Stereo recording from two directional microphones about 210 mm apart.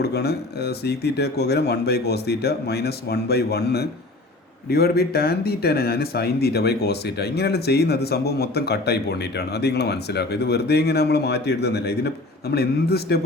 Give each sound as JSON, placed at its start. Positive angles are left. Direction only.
{"t": 0.0, "sound": "speech", "side_deg": 50}